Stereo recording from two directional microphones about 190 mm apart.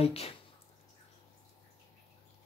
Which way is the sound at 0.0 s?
30° left (ahead or behind).